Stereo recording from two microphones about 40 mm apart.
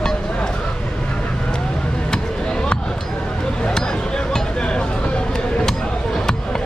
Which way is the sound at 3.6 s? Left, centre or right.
Centre.